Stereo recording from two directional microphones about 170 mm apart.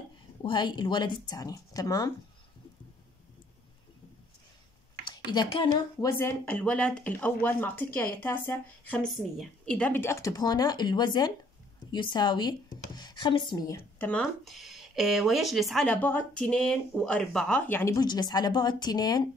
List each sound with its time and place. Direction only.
0.4 s speech: 25° left (ahead or behind)
5.3 s speech: 30° left (ahead or behind)
6.0 s speech: 15° left (ahead or behind)